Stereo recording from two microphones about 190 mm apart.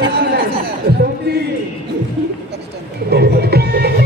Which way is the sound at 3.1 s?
55° right (ahead or behind).